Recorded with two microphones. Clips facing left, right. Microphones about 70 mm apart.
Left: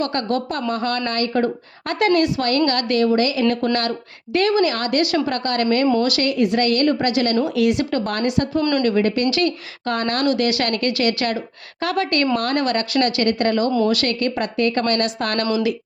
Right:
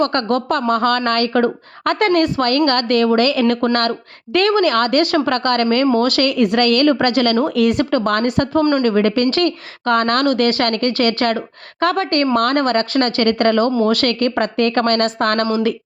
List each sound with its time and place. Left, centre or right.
0.0 s a woman's voice: right